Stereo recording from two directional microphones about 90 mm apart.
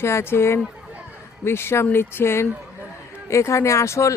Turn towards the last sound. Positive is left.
turn(degrees=35)  # may be behind; listen again after turning